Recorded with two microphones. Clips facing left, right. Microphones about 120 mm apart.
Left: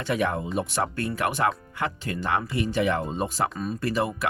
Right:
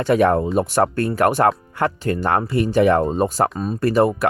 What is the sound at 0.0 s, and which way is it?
Speech, 50° right (ahead or behind).